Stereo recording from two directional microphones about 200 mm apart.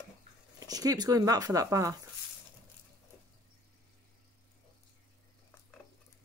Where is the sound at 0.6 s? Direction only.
20° right (ahead or behind).